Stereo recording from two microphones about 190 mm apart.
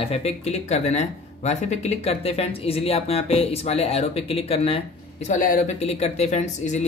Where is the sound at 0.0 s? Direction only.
35° left (ahead or behind).